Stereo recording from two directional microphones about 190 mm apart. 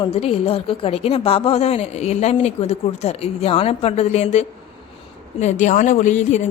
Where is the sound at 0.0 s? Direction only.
30° left (ahead or behind).